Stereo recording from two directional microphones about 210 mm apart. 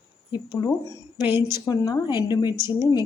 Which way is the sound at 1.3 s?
10° right (ahead or behind).